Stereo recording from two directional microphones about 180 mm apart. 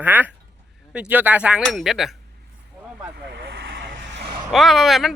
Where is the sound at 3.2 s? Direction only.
70° right (ahead or behind).